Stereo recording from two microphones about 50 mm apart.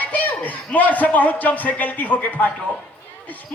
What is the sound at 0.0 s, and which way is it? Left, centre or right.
A man's voice, left.